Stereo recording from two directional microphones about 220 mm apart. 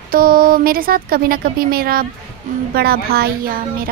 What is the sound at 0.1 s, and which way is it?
Speech, 40° right (ahead or behind).